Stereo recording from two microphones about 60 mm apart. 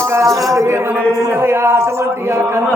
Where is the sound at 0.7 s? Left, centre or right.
Right.